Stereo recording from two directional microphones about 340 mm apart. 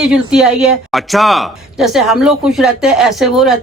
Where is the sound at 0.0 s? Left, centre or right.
Centre.